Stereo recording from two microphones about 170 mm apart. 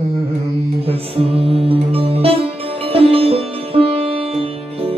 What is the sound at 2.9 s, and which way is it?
Sitar, 35° right (ahead or behind).